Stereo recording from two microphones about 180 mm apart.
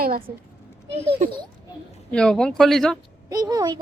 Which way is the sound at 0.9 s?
35° right (ahead or behind).